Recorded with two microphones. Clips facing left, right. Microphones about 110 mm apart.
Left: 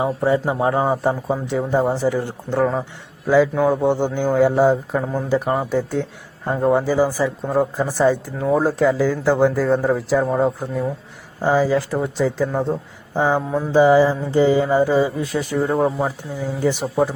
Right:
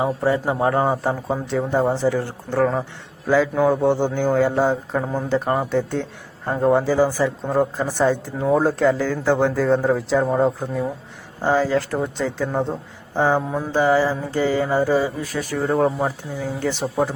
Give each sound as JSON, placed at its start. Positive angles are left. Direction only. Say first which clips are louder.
{"t": 0.3, "sound": "a man's voice", "louder": "left 1 dB", "side_deg": 20}
{"t": 13.4, "sound": "speech", "louder": "left 2 dB", "side_deg": 0}
{"t": 13.7, "sound": "speech", "louder": "left 5 dB", "side_deg": 15}
{"t": 15.6, "sound": "speech", "louder": "right 1 dB", "side_deg": 5}
{"t": 16.4, "sound": "speech", "louder": "left 4 dB", "side_deg": 15}
{"t": 16.8, "sound": "speech", "louder": "even", "side_deg": 0}